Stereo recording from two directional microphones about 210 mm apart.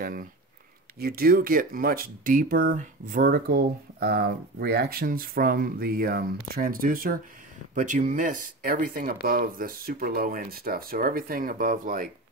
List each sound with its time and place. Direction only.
0.0 s speech: 45° right (ahead or behind)